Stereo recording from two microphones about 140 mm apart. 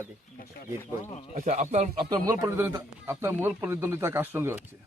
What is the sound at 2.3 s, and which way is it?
Speech, 20° right (ahead or behind).